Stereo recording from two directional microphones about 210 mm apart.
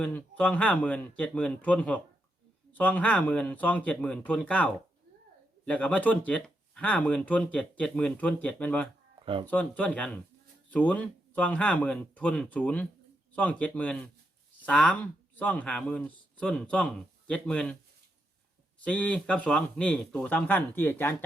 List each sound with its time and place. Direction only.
0.0 s speech: 5° left (ahead or behind)
9.2 s speech: 25° right (ahead or behind)
9.5 s a man's voice: 5° left (ahead or behind)
18.9 s speech: 5° left (ahead or behind)